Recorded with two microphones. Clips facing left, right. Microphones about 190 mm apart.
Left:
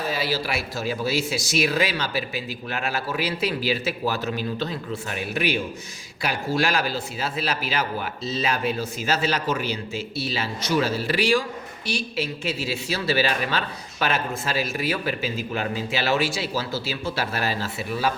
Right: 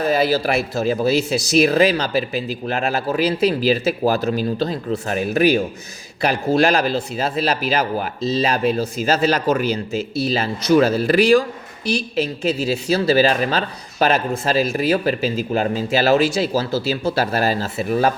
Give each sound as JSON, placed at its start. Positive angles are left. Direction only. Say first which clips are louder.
{"t": 0.0, "sound": "speech", "louder": "right 9 dB", "side_deg": -50}
{"t": 6.7, "sound": "speech", "louder": "right 7 dB", "side_deg": -40}